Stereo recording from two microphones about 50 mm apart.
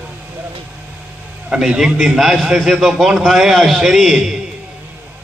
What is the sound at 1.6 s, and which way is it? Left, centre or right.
A man's voice, centre.